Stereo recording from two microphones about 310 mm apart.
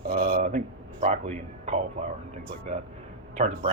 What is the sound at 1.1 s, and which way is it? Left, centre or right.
A man's voice, right.